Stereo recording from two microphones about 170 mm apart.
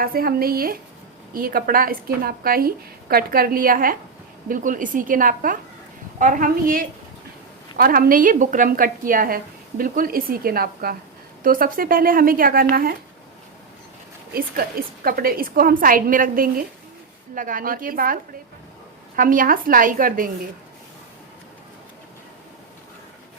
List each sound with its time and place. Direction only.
0.0 s a woman's voice: 60° right (ahead or behind)
14.3 s a woman's voice: 60° right (ahead or behind)